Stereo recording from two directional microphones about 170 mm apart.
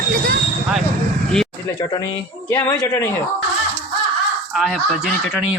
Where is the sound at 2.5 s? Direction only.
10° left (ahead or behind).